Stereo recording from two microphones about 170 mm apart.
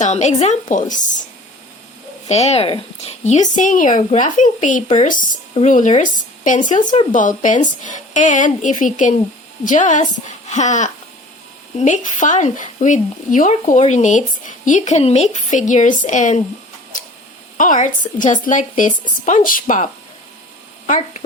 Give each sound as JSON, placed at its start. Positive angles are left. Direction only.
{"t": 0.0, "sound": "speech", "side_deg": 45}
{"t": 2.2, "sound": "a woman's voice", "side_deg": 40}
{"t": 17.6, "sound": "speech", "side_deg": 50}